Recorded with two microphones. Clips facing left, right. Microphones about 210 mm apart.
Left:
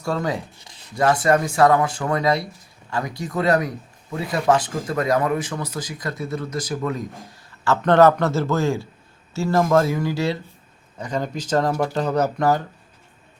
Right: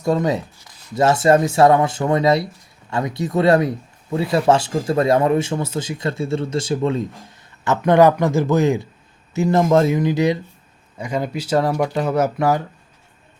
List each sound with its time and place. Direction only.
0.0 s speech: 20° right (ahead or behind)
7.6 s a man's voice: 15° right (ahead or behind)